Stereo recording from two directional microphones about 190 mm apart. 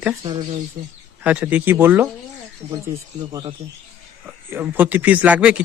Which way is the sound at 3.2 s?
20° right (ahead or behind).